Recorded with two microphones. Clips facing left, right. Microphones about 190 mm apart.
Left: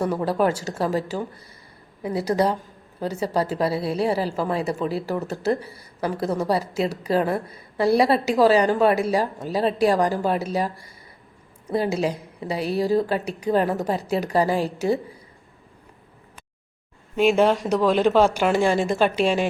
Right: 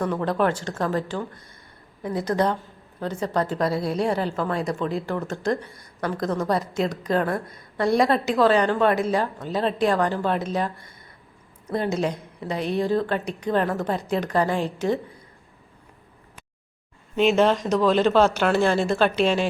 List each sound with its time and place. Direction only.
0.0 s a woman's voice: 10° left (ahead or behind)
17.2 s a woman's voice: 10° left (ahead or behind)